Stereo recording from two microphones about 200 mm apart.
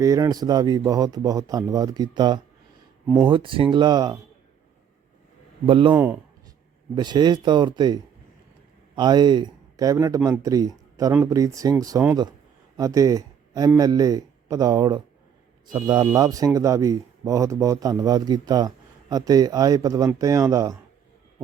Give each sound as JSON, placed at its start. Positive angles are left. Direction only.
{"t": 0.0, "sound": "a man's voice", "side_deg": -15}
{"t": 5.6, "sound": "a man's voice", "side_deg": -25}
{"t": 5.9, "sound": "speech", "side_deg": -10}
{"t": 6.9, "sound": "a man's voice", "side_deg": -20}
{"t": 9.0, "sound": "a man's voice", "side_deg": -20}